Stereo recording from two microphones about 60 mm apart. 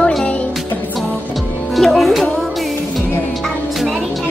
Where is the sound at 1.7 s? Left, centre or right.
Centre.